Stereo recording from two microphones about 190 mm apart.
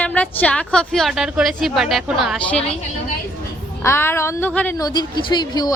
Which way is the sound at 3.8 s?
15° left (ahead or behind).